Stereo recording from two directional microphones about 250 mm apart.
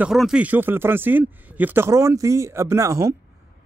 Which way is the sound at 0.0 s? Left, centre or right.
Centre.